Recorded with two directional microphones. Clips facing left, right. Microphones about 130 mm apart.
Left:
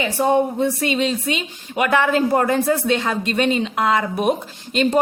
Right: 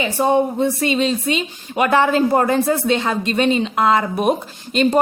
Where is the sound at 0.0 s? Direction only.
25° right (ahead or behind).